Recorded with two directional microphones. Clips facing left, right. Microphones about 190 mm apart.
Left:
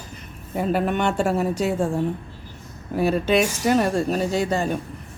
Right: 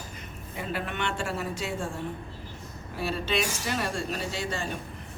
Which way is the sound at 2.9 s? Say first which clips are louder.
Left 10 dB; 45° left (ahead or behind).